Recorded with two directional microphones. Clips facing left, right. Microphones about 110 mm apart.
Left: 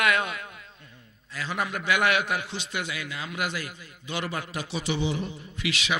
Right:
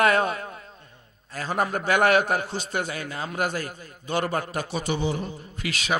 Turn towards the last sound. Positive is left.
turn(degrees=-45)  # may be behind; listen again after turning